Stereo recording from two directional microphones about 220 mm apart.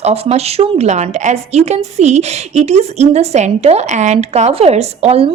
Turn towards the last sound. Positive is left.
turn(degrees=-30)  # may be behind; listen again after turning